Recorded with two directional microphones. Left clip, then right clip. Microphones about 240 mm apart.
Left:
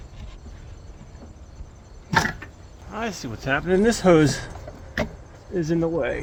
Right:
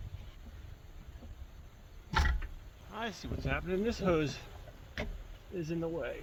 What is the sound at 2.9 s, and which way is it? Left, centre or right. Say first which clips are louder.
Speech: left 10 dB; right.